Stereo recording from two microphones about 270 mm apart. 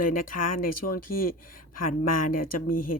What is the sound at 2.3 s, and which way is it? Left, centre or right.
Speech, left.